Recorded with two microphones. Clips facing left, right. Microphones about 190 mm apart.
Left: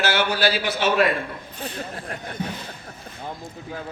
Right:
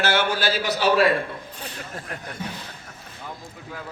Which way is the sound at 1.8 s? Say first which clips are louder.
Left 3 dB; 35° left (ahead or behind).